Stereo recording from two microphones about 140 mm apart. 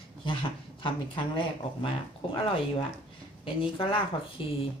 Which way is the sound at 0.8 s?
35° left (ahead or behind).